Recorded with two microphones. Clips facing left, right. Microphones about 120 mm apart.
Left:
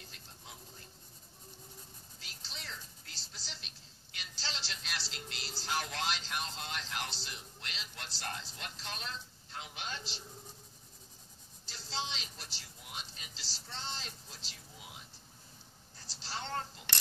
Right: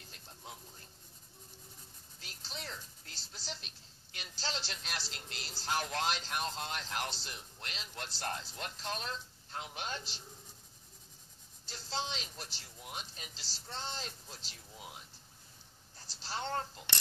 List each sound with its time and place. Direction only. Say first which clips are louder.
2.1 s music: right 5 dB; 45° right (ahead or behind)
11.6 s speech: right 1 dB; 50° right (ahead or behind)
16.1 s speech: right 3 dB; 50° right (ahead or behind)